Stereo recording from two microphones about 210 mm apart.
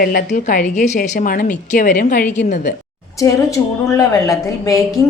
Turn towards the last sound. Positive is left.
turn(degrees=15)  # may be behind; listen again after turning